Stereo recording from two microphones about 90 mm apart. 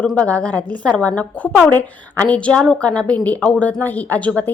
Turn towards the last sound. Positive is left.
turn(degrees=15)  # may be behind; listen again after turning